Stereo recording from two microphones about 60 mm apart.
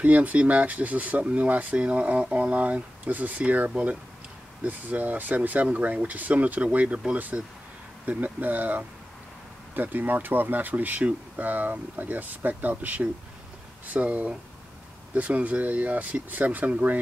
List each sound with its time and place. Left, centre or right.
0.0 s speech: right